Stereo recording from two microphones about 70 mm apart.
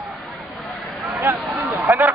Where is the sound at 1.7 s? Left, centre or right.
Right.